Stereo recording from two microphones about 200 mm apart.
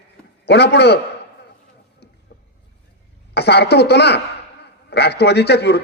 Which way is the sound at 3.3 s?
55° left (ahead or behind).